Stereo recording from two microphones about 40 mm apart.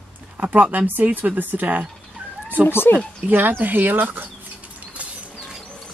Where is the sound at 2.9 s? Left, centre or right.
Left.